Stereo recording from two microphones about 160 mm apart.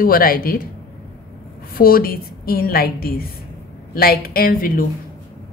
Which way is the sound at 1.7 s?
65° left (ahead or behind).